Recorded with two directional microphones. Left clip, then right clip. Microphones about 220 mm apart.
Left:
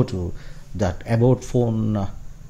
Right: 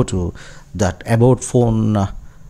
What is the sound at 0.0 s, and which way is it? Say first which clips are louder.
Speech: right 5 dB; 25° right (ahead or behind).